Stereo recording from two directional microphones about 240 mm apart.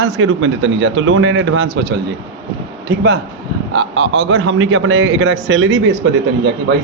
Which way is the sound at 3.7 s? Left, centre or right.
Right.